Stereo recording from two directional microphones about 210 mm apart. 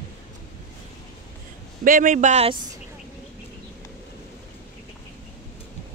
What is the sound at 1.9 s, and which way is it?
Speech, 40° right (ahead or behind).